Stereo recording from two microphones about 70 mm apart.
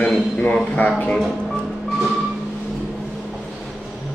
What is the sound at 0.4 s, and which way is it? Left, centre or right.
Speech, left.